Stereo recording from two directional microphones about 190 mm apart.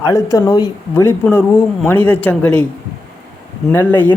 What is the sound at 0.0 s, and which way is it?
Speech, 15° left (ahead or behind).